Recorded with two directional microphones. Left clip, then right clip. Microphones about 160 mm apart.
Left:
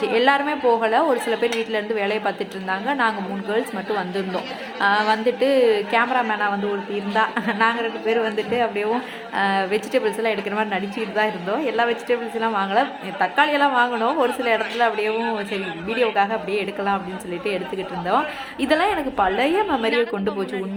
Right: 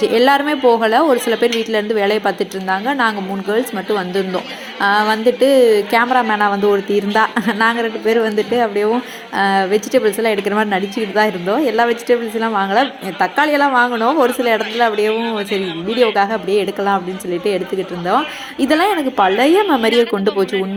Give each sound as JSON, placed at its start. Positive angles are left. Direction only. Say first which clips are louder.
{"t": 0.0, "sound": "a woman's voice", "louder": "right 5 dB", "side_deg": -30}
{"t": 18.6, "sound": "a woman's voice", "louder": "right 5 dB", "side_deg": -25}